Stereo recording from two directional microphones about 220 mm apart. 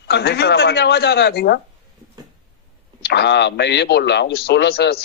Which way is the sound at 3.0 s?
50° left (ahead or behind).